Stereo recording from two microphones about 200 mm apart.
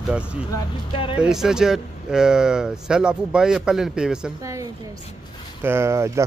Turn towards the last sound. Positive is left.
turn(degrees=-15)  # may be behind; listen again after turning